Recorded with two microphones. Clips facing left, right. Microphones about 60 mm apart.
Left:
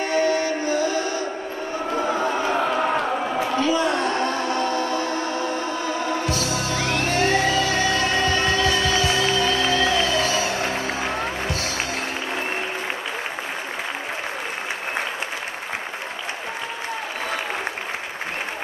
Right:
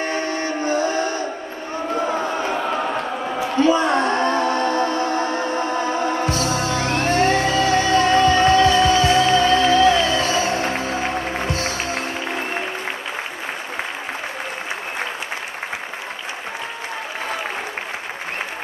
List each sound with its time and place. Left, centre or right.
0.1 s music: right
3.5 s music: right